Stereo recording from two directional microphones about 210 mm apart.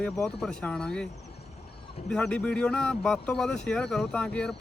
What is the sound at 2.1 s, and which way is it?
Speech, 5° left (ahead or behind).